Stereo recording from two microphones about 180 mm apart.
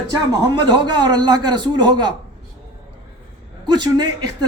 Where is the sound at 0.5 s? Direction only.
20° right (ahead or behind).